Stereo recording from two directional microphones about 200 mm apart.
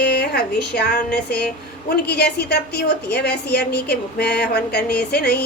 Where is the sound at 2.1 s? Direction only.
55° left (ahead or behind).